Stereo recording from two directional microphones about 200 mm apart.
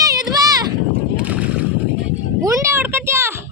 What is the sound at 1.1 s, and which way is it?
Boat, 5° right (ahead or behind).